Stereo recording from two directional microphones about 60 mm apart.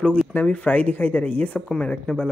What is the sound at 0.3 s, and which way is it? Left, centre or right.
Speech, left.